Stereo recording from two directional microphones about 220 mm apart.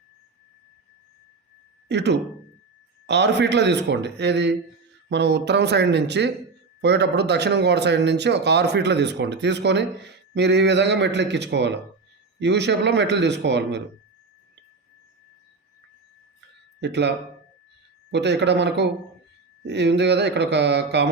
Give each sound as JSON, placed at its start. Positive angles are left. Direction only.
{"t": 1.9, "sound": "speech", "side_deg": -50}
{"t": 16.8, "sound": "speech", "side_deg": -50}
{"t": 18.1, "sound": "speech", "side_deg": -50}